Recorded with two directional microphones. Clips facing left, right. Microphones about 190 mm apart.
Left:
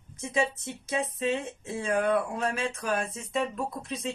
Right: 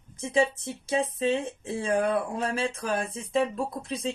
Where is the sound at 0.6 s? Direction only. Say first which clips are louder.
Right 3 dB; 30° right (ahead or behind).